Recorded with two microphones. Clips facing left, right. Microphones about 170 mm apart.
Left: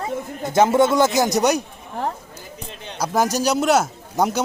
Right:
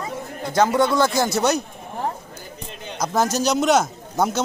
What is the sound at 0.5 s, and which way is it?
Speech, 20° left (ahead or behind).